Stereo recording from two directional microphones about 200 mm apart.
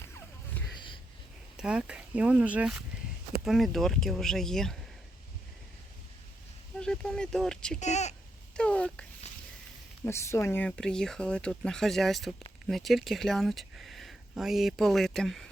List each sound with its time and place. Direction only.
1.5 s speech: 5° right (ahead or behind)
6.7 s speech: 5° left (ahead or behind)
7.8 s speech: 35° left (ahead or behind)
8.5 s speech: 5° left (ahead or behind)